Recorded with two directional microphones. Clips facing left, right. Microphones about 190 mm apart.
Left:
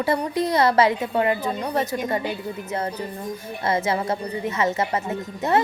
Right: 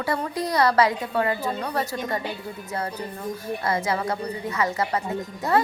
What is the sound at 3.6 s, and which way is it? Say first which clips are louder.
A woman's voice: left 3 dB; 25° left (ahead or behind).